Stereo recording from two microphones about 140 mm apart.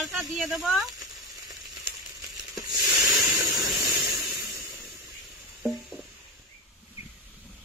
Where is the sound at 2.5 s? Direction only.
25° right (ahead or behind).